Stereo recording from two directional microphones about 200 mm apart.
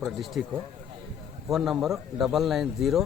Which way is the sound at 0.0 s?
Centre (ahead or behind).